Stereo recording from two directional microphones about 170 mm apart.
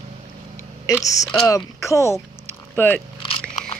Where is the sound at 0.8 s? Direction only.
20° left (ahead or behind).